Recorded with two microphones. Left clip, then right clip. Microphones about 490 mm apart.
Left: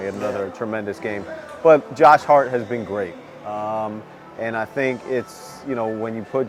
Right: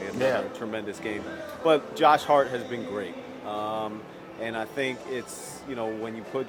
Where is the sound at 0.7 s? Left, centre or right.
Left.